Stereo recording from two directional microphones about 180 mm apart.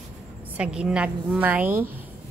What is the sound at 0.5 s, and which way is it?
A woman's voice, 5° right (ahead or behind).